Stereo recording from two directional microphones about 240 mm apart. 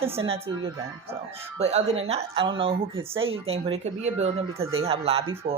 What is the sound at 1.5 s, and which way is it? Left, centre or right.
A woman's voice, right.